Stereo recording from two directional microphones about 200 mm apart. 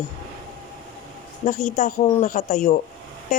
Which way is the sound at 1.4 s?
35° left (ahead or behind).